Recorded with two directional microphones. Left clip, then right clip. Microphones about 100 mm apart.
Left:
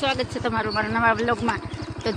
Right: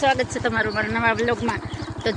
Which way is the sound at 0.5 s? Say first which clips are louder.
Right 1 dB; 25° left (ahead or behind).